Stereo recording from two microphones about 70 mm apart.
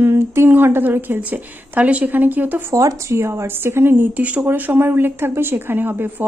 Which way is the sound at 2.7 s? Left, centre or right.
Right.